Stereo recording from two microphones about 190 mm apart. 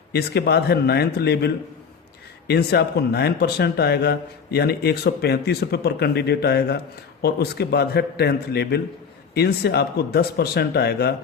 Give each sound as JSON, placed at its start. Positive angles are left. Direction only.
{"t": 0.1, "sound": "speech", "side_deg": 60}